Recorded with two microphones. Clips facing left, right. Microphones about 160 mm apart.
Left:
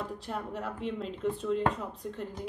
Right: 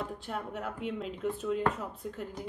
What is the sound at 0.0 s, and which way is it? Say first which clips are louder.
A woman's voice: left 1 dB; centre (ahead or behind).